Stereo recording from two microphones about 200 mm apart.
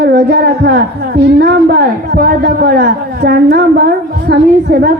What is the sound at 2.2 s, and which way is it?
A woman's voice, 50° right (ahead or behind).